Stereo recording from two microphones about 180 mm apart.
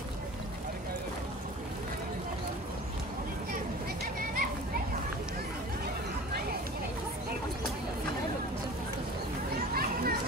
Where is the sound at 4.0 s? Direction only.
50° right (ahead or behind).